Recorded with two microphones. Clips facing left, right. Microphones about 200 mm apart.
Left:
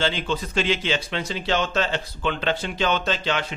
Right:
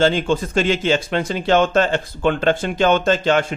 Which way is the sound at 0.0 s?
50° right (ahead or behind).